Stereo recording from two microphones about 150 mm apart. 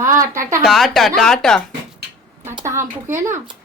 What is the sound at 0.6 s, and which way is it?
Speech, centre (ahead or behind).